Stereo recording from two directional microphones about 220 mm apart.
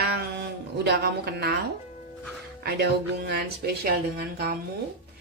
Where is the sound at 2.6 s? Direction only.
45° right (ahead or behind).